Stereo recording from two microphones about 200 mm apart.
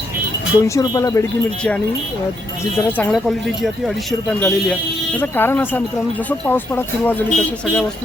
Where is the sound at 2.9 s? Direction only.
5° left (ahead or behind).